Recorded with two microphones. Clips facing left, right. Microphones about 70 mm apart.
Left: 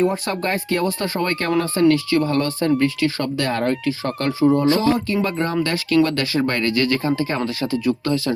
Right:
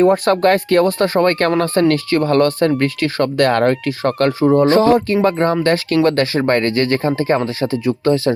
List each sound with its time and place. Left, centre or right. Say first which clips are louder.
0.0 s speech: right 8 dB; right